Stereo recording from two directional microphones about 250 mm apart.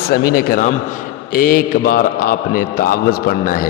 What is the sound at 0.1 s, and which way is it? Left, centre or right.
Mantra, left.